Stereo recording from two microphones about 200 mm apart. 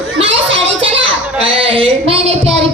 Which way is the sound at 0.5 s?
65° right (ahead or behind).